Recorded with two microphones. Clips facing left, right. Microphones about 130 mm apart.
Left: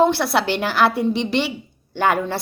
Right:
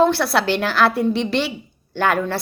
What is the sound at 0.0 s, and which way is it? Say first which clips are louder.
A woman's voice: even; 20° left (ahead or behind).